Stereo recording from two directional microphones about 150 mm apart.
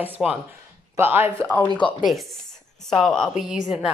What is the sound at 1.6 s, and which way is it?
Speech, 30° left (ahead or behind).